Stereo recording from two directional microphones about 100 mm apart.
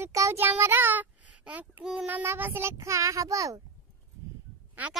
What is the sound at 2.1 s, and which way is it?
A child's voice, 20° right (ahead or behind).